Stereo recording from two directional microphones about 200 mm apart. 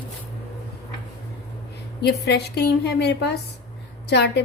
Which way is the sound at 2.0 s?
55° left (ahead or behind).